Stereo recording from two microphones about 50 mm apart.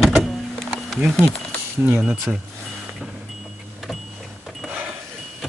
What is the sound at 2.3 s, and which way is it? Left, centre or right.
Speech, right.